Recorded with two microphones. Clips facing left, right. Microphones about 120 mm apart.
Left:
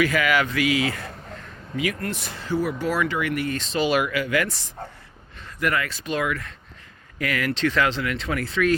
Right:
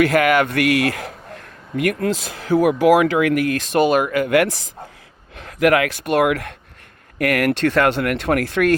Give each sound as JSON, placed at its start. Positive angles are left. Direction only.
{"t": 0.0, "sound": "speech", "side_deg": -65}
{"t": 1.7, "sound": "speech", "side_deg": -60}
{"t": 3.8, "sound": "speech", "side_deg": -45}
{"t": 5.4, "sound": "speech", "side_deg": -90}